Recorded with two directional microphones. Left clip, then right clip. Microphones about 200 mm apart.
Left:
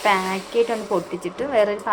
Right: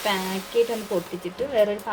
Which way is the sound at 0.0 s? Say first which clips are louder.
Left 6 dB; centre (ahead or behind).